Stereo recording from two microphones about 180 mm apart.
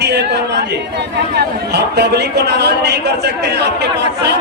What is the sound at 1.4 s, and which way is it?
A man's voice, 65° right (ahead or behind).